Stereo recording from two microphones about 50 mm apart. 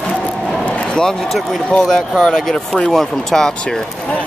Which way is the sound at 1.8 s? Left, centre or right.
Centre.